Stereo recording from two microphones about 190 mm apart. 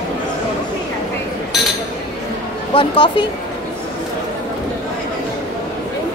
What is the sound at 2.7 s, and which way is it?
Speech, 25° left (ahead or behind).